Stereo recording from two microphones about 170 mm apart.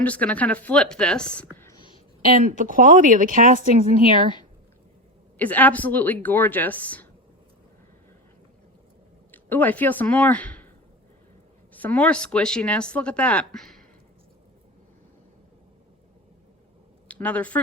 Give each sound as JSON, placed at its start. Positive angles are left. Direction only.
{"t": 0.0, "sound": "speech", "side_deg": 10}
{"t": 1.7, "sound": "a sound", "side_deg": 25}
{"t": 2.6, "sound": "speech", "side_deg": -50}
{"t": 5.4, "sound": "speech", "side_deg": 10}
{"t": 9.3, "sound": "speech", "side_deg": 10}
{"t": 11.7, "sound": "speech", "side_deg": 10}
{"t": 17.1, "sound": "speech", "side_deg": 10}